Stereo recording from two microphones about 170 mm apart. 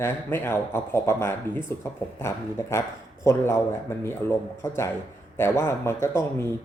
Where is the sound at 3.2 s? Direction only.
15° left (ahead or behind).